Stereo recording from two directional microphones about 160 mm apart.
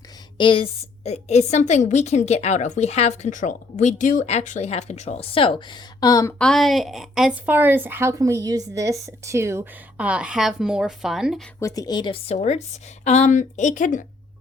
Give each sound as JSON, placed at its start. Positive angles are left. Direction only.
{"t": 0.3, "sound": "a woman's voice", "side_deg": 30}
{"t": 6.4, "sound": "a woman's voice", "side_deg": 0}
{"t": 11.6, "sound": "a woman's voice", "side_deg": 20}